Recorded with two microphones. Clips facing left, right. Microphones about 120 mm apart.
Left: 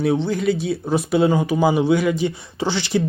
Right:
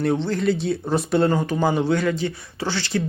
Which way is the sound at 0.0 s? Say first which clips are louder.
Left 2 dB; 5° left (ahead or behind).